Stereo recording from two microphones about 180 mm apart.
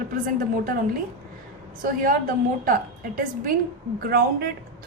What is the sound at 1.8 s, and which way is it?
A woman's voice, 50° right (ahead or behind).